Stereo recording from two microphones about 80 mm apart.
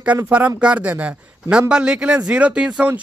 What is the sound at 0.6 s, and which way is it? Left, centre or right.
Speech, centre.